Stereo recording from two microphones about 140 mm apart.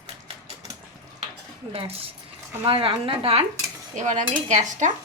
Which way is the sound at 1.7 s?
40° right (ahead or behind).